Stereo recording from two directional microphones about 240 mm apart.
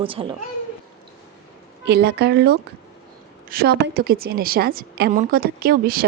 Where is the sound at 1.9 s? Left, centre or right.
Right.